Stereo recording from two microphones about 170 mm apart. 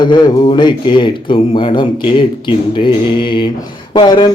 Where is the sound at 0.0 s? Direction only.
25° left (ahead or behind).